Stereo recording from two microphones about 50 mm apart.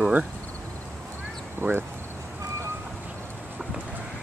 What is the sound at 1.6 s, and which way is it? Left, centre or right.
Speech, right.